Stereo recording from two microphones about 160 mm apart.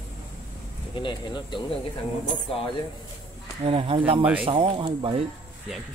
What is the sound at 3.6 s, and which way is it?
Speech, 35° right (ahead or behind).